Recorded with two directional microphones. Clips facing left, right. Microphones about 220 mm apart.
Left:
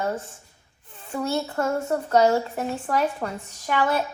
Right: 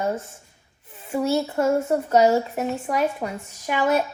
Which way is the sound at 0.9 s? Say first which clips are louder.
Right 4 dB; 10° right (ahead or behind).